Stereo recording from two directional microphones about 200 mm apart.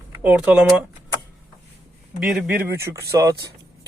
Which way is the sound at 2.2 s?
5° right (ahead or behind).